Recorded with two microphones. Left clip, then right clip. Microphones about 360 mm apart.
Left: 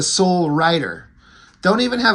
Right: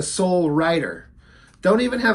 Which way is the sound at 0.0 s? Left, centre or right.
Centre.